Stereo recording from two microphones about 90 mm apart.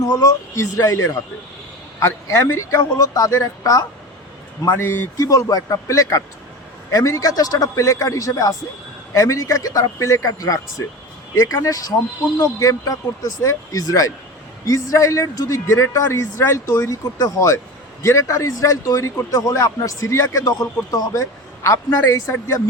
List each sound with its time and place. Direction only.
0.3 s speech: 30° left (ahead or behind)
4.7 s speech: 25° left (ahead or behind)
5.1 s speech: 40° left (ahead or behind)
18.0 s speech: 30° left (ahead or behind)